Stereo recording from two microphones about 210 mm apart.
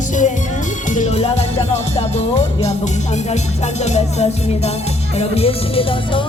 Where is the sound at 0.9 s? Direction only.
35° left (ahead or behind).